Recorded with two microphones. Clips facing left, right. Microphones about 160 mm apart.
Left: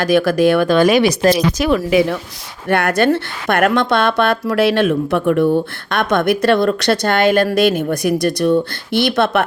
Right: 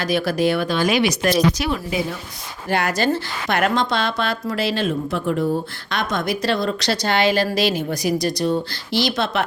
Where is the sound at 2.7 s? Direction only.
55° left (ahead or behind).